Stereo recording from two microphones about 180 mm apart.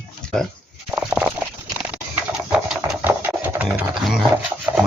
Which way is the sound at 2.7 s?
5° right (ahead or behind).